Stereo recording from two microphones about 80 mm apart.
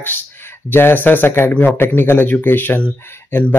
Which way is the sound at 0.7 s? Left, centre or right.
Left.